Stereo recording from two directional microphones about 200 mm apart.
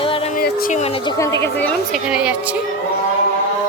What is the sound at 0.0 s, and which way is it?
Music, 25° left (ahead or behind).